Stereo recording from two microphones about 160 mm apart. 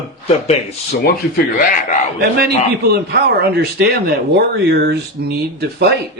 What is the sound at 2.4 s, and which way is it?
A man's voice, 80° right.